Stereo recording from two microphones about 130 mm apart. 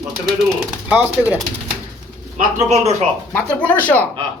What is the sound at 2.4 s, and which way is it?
Speech, 65° right (ahead or behind).